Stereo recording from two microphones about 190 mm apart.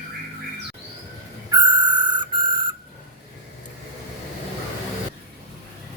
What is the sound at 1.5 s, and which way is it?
Whistle, 20° right (ahead or behind).